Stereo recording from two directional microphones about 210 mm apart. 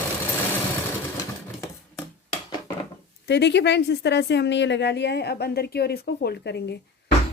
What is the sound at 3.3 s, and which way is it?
A woman's voice, 55° left (ahead or behind).